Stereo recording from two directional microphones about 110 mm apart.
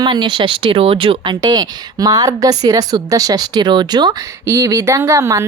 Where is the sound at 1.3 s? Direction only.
30° right (ahead or behind).